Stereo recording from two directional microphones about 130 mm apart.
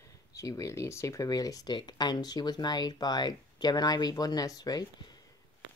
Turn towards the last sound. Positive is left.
turn(degrees=30)  # may be behind; listen again after turning